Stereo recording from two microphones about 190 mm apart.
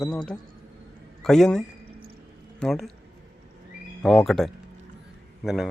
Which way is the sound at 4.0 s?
Centre (ahead or behind).